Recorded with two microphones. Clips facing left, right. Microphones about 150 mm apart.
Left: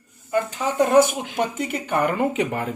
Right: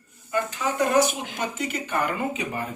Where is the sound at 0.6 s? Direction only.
35° left (ahead or behind).